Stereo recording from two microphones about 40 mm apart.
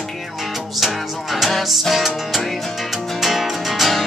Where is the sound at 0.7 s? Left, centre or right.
Centre.